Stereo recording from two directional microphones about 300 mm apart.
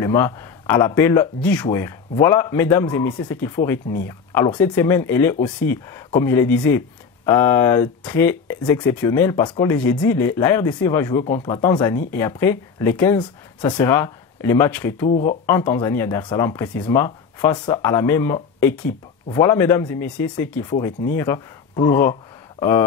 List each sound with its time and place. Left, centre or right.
0.0 s speech: centre
15.0 s speech: left
15.4 s speech: centre